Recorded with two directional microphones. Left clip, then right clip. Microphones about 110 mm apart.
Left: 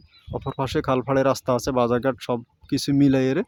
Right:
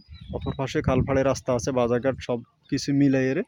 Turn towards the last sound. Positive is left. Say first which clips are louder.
# left 2 dB
turn(degrees=25)  # may be behind; listen again after turning